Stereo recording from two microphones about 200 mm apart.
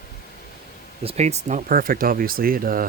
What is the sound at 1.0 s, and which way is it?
Speech, 30° right (ahead or behind).